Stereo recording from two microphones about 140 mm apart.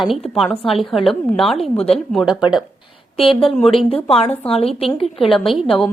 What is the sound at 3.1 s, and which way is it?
Speech, 40° left (ahead or behind).